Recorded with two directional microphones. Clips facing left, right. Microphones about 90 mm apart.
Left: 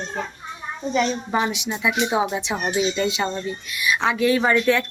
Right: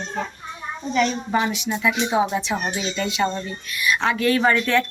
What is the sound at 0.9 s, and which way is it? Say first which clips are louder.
Speech: right 1 dB; 15° left (ahead or behind).